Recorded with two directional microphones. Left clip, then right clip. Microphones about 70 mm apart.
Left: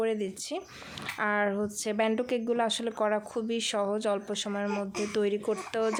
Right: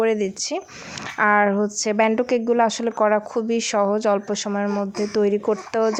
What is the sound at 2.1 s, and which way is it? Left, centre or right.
Speech, centre.